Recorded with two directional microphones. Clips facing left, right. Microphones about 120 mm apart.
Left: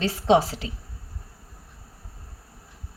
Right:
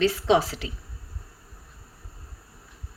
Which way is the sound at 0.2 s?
40° left (ahead or behind).